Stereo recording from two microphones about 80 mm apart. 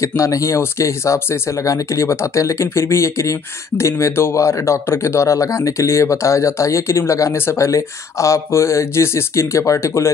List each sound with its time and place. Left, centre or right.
0.0 s speech: left